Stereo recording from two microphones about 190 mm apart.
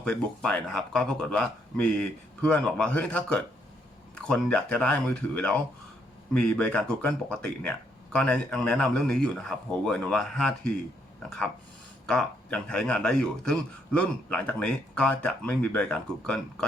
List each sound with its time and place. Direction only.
0.0 s a man's voice: 5° left (ahead or behind)